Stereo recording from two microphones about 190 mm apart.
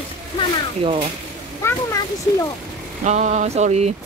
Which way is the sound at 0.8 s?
30° right (ahead or behind).